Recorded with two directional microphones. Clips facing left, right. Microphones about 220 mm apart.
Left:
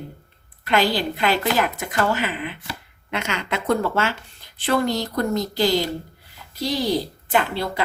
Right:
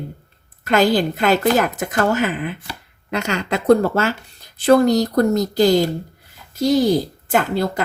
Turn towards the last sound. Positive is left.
turn(degrees=-45)  # may be behind; listen again after turning